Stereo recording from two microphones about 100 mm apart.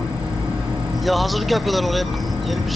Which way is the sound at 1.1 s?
Centre (ahead or behind).